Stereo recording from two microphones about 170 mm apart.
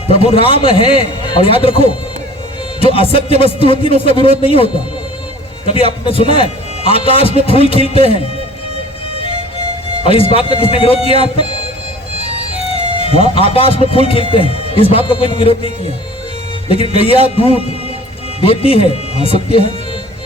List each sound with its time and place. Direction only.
0.1 s speech: 35° left (ahead or behind)
10.0 s speech: 35° left (ahead or behind)
12.7 s speech: 35° left (ahead or behind)